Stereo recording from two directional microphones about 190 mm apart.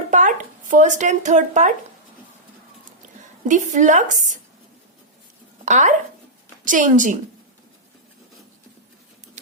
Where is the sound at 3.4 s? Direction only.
40° right (ahead or behind).